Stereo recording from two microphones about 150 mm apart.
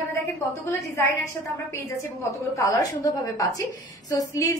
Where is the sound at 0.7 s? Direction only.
20° left (ahead or behind).